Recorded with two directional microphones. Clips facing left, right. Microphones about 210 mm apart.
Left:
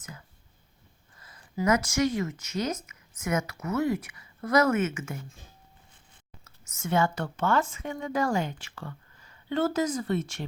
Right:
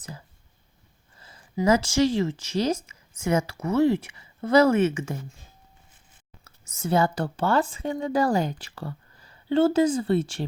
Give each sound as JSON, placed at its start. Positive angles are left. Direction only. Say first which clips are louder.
{"t": 0.0, "sound": "a sound", "louder": "right 5 dB", "side_deg": -35}
{"t": 1.2, "sound": "speech", "louder": "right 4 dB", "side_deg": -30}
{"t": 6.4, "sound": "speech", "louder": "right 5 dB", "side_deg": -35}